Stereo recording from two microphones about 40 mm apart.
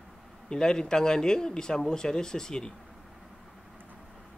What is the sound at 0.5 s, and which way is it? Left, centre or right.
Speech, centre.